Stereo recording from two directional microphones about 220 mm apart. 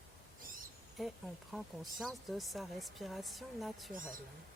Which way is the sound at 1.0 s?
Centre (ahead or behind).